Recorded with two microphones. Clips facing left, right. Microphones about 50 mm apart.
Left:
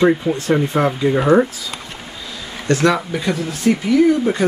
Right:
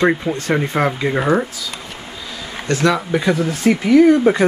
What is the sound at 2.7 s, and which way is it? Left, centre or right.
Speech, centre.